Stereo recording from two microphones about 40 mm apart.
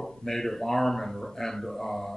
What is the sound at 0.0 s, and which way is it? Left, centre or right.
Speech, centre.